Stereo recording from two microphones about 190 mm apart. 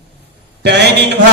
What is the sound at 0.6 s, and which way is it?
Speech, 60° right (ahead or behind).